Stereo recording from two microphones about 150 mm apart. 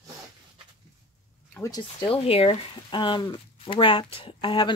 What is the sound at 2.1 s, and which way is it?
Speech, 40° left (ahead or behind).